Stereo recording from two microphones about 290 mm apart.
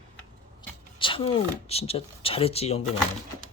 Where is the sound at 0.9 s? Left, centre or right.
Centre.